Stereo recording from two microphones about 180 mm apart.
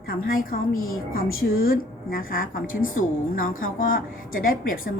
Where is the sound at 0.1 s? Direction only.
55° left (ahead or behind).